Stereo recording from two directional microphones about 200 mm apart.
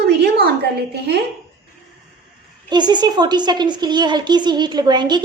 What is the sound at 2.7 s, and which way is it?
A woman's voice, 20° right (ahead or behind).